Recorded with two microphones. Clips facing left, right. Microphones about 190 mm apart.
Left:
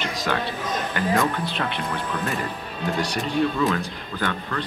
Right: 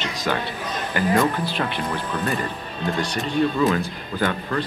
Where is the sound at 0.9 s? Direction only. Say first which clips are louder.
Right 4 dB; 5° right (ahead or behind).